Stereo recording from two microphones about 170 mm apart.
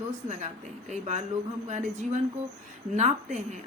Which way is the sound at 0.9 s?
45° right (ahead or behind).